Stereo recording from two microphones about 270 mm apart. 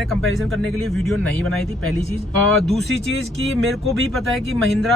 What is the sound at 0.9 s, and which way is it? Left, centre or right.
Speech, centre.